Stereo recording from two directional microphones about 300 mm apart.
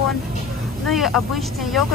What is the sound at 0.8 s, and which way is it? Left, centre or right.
Speech, centre.